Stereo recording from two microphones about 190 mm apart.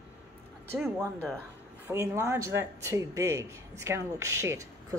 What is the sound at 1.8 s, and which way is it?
A woman's voice, 15° right (ahead or behind).